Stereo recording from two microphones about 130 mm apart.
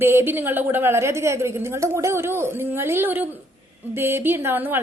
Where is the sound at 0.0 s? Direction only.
15° right (ahead or behind).